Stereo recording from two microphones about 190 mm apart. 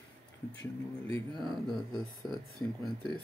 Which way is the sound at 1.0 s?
25° right (ahead or behind).